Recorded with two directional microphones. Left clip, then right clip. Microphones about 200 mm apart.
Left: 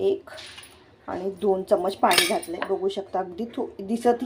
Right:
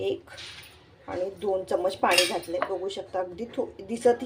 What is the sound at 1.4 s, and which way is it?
Speech, 15° left (ahead or behind).